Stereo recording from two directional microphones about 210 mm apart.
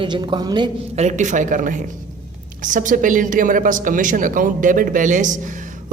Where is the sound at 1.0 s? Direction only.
35° right (ahead or behind).